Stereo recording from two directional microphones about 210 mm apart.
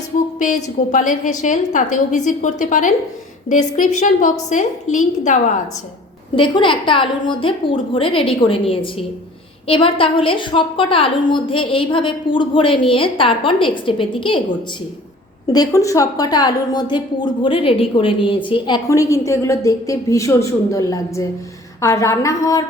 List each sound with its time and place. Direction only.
0.3 s a woman's voice: 35° left (ahead or behind)
6.3 s a woman's voice: 25° left (ahead or behind)
15.5 s a woman's voice: 15° left (ahead or behind)